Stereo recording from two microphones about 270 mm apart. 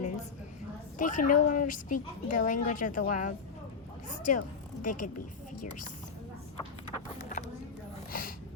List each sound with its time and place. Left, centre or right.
0.9 s speech: left
6.8 s run: left
8.1 s a sound: left